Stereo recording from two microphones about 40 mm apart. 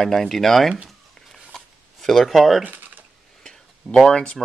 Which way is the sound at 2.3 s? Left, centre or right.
Centre.